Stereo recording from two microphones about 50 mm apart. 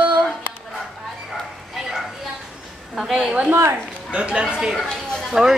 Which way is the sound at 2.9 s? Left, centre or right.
Centre.